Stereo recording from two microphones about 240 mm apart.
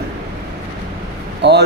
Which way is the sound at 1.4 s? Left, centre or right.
Right.